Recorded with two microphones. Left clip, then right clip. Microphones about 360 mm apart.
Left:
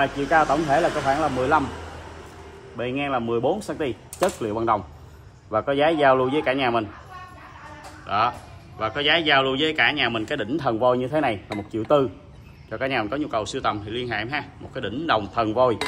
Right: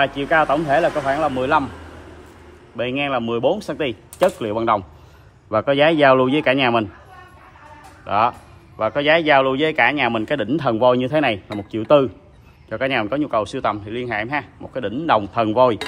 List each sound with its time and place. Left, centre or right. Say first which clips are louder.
0.0 s speech: right 3 dB; centre
2.8 s speech: right 4 dB; centre
8.1 s a man's voice: right 4 dB; centre